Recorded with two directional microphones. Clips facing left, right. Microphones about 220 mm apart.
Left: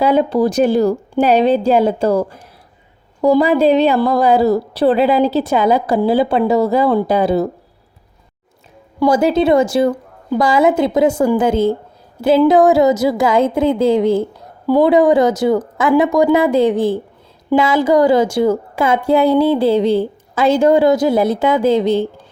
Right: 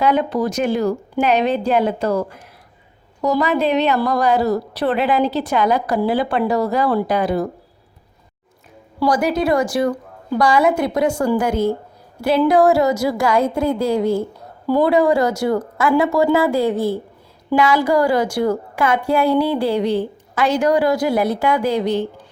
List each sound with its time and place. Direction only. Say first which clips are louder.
0.0 s a woman's voice: left 4 dB; 30° left (ahead or behind)
9.0 s a woman's voice: left 5 dB; 25° left (ahead or behind)